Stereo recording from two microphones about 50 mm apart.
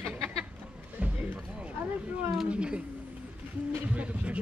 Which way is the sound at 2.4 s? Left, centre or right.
Right.